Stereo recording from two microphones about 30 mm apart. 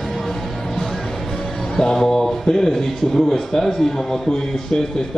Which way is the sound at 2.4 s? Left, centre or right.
Centre.